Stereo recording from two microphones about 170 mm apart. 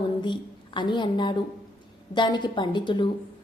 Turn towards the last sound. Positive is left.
turn(degrees=30)  # may be behind; listen again after turning